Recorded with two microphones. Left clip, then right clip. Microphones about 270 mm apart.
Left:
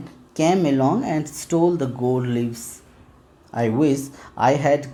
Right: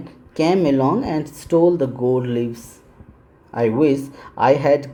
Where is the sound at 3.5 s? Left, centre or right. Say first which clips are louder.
Right 3 dB; left.